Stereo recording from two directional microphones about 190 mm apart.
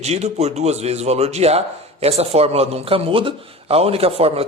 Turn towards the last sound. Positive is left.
turn(degrees=-30)  # may be behind; listen again after turning